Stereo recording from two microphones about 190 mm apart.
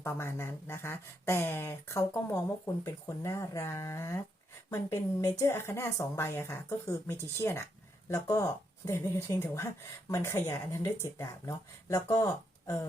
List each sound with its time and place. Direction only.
0.0 s a woman's voice: 15° left (ahead or behind)